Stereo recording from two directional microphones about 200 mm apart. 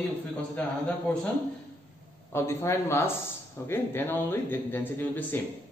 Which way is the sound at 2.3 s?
15° left (ahead or behind).